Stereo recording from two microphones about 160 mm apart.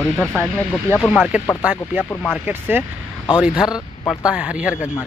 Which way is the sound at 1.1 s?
5° right (ahead or behind).